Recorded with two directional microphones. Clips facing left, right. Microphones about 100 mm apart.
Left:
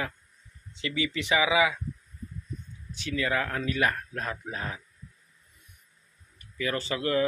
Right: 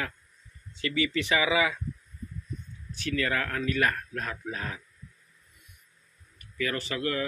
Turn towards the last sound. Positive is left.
turn(degrees=25)  # may be behind; listen again after turning